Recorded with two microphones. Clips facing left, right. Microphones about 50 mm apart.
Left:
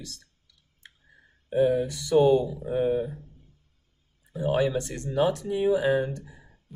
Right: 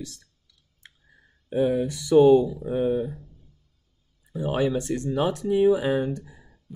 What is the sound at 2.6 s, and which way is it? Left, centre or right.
Speech, left.